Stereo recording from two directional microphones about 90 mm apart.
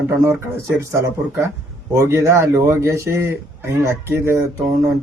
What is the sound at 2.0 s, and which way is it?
Speech, 30° right (ahead or behind).